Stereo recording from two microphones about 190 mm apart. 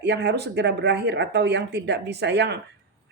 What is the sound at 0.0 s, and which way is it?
A woman's voice, 65° right (ahead or behind).